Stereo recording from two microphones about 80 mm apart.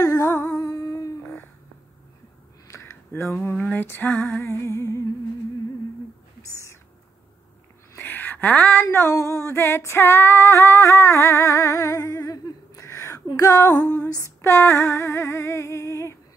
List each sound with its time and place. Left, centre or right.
0.0 s music: left
0.6 s humming: left
2.7 s a sound: left
3.7 s music: left
6.5 s owl: left
8.0 s a sound: left
8.9 s female singing: left
12.8 s a sound: left
13.4 s female singing: left
14.4 s female singing: left